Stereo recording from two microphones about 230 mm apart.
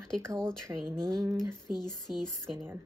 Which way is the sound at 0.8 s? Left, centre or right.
Centre.